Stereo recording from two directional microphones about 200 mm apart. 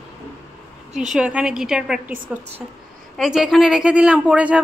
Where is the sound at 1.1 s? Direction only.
5° right (ahead or behind).